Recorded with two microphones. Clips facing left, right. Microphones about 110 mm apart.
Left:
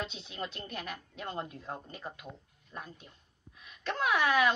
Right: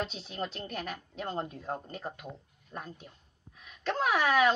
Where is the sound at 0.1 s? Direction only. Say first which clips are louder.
Right 3 dB; 40° right (ahead or behind).